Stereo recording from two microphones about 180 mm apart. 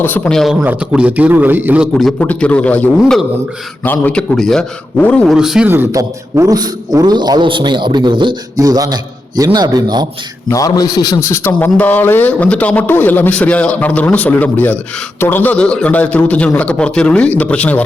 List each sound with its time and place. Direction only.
0.0 s a man's voice: 5° left (ahead or behind)
0.6 s a man's voice: 10° right (ahead or behind); by 5.2 s 10° left (ahead or behind)
5.3 s a man's voice: centre (ahead or behind); by 10.1 s 20° right (ahead or behind)
10.5 s a man's voice: 20° left (ahead or behind)